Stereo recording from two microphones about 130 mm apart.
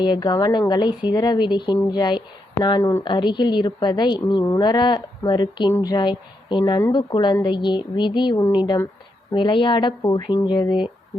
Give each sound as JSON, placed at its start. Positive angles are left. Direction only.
{"t": 0.0, "sound": "speech", "side_deg": 35}